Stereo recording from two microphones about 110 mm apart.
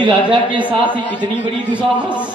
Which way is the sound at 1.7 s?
10° right (ahead or behind).